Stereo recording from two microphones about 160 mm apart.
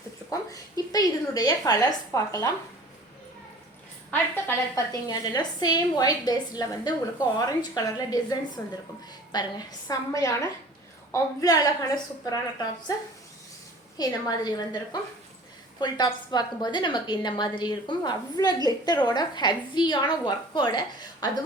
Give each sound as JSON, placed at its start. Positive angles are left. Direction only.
{"t": 0.3, "sound": "a woman's voice", "side_deg": 20}
{"t": 4.1, "sound": "a woman's voice", "side_deg": 20}
{"t": 15.8, "sound": "a woman's voice", "side_deg": 25}